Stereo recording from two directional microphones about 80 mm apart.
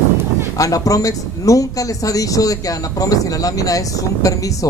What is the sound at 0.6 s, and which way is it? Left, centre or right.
Speech, left.